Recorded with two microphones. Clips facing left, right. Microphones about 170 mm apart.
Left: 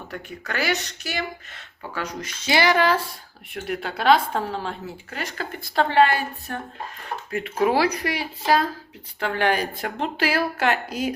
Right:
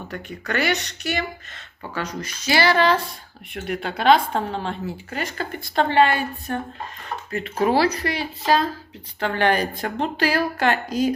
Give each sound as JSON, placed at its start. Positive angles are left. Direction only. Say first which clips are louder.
{"t": 0.1, "sound": "a woman's voice", "louder": "right 4 dB", "side_deg": 5}
{"t": 2.2, "sound": "a woman's voice", "louder": "right 1 dB", "side_deg": 20}